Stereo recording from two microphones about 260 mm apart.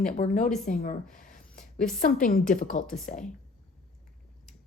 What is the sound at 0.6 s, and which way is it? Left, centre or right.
A woman's voice, left.